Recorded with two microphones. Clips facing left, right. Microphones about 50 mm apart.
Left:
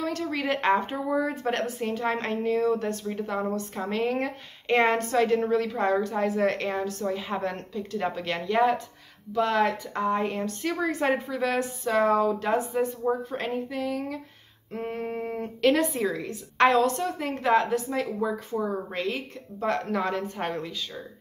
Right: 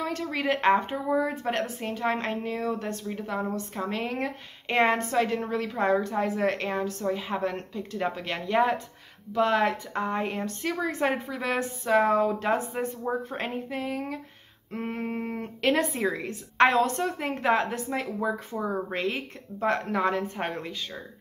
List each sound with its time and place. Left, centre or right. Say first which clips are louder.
0.2 s a woman's voice: right 4 dB; centre